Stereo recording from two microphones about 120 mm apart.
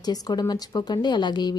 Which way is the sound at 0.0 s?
35° left (ahead or behind).